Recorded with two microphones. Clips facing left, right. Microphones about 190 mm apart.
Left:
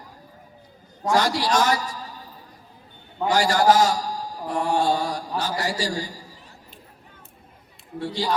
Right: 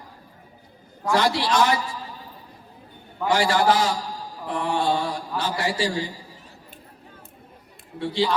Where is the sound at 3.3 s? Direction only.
40° left (ahead or behind).